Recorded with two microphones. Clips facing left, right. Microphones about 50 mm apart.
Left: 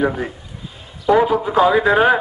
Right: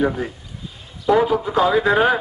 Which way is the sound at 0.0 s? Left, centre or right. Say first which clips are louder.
Left 1 dB; centre.